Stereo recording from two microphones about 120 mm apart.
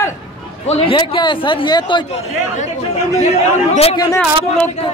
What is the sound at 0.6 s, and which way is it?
Speech, 55° left (ahead or behind).